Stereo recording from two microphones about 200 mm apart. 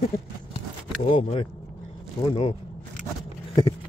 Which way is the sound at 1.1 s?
30° left (ahead or behind).